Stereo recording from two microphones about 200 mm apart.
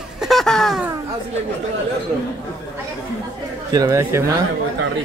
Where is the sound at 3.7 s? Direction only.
15° right (ahead or behind).